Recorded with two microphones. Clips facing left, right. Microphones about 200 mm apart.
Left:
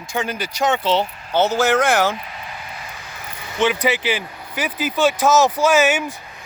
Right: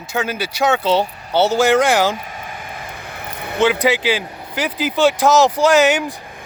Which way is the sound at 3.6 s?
10° right (ahead or behind).